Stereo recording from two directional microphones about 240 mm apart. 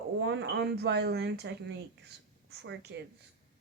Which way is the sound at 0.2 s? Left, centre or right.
Right.